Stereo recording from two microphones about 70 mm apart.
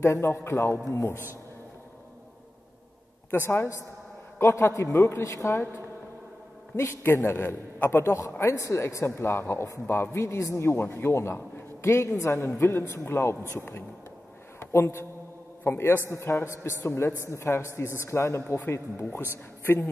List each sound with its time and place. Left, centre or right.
0.0 s a man's voice: left
3.3 s a man's voice: left
6.8 s a man's voice: left
8.3 s a man's voice: left